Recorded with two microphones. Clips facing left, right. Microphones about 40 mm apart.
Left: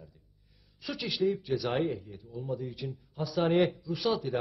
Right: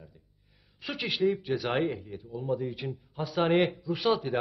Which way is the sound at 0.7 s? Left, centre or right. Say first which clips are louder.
Right 2 dB; right.